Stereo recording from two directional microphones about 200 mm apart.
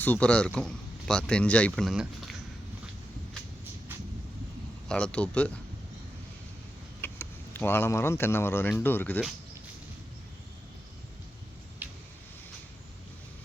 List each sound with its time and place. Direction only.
0.0 s speech: 5° left (ahead or behind)
4.9 s speech: 5° left (ahead or behind)
7.0 s speech: 10° left (ahead or behind)
11.8 s a sound: 10° right (ahead or behind)